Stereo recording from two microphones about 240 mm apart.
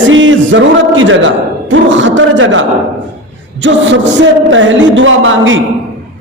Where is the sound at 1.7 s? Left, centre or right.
Right.